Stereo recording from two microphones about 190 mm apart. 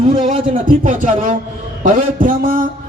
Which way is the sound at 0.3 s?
45° right (ahead or behind).